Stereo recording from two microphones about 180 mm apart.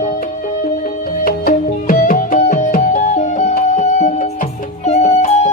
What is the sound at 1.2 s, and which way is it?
Music, 50° left (ahead or behind).